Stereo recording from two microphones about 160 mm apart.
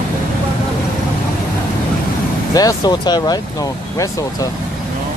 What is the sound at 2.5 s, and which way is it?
Speech, 25° left (ahead or behind).